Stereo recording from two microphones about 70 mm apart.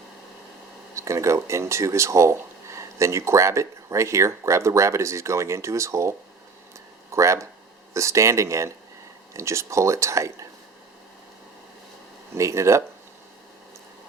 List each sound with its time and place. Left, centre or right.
0.9 s speech: right
12.4 s speech: right